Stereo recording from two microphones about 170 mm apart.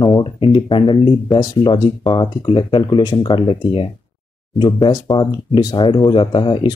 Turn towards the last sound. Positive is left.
turn(degrees=30)  # may be behind; listen again after turning